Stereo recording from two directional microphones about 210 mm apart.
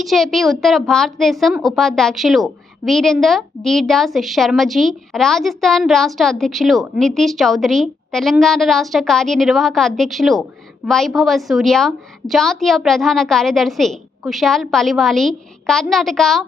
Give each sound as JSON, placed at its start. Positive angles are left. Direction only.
{"t": 0.0, "sound": "a woman's voice", "side_deg": 0}